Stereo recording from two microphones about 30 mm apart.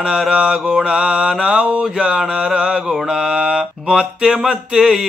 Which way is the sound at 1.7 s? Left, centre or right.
Right.